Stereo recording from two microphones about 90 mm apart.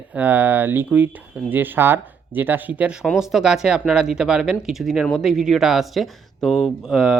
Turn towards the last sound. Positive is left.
turn(degrees=-5)  # may be behind; listen again after turning